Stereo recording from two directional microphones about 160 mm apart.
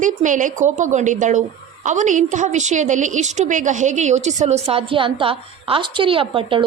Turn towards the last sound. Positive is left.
turn(degrees=-35)  # may be behind; listen again after turning